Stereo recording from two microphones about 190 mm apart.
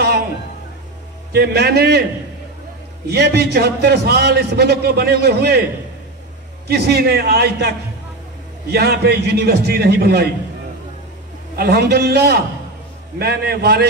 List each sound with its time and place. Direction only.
1.3 s a man's voice: 60° right (ahead or behind)
3.1 s a man's voice: 60° right (ahead or behind)
6.7 s a man's voice: 60° right (ahead or behind)
8.7 s a man's voice: 55° right (ahead or behind)
11.5 s a man's voice: 55° right (ahead or behind)